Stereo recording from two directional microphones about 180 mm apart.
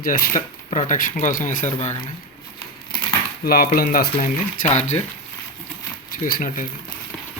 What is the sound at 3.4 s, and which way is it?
Speech, 55° left (ahead or behind).